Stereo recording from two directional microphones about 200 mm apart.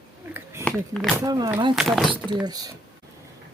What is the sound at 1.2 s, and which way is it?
Speech, 20° right (ahead or behind).